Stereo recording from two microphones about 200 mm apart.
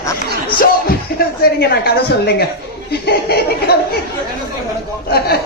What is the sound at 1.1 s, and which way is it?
Chuckle, 50° left (ahead or behind).